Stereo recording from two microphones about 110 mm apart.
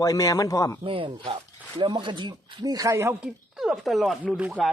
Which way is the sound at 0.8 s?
55° right (ahead or behind).